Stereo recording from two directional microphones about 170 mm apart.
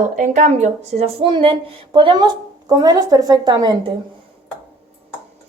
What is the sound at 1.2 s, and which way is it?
A woman's voice, 30° right (ahead or behind).